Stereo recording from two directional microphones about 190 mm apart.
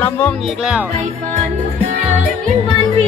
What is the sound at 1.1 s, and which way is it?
Music, 35° right (ahead or behind).